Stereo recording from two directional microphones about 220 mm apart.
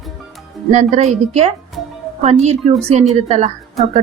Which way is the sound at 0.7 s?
30° right (ahead or behind).